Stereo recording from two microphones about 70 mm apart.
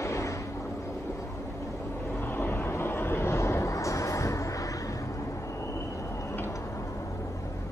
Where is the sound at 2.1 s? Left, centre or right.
Left.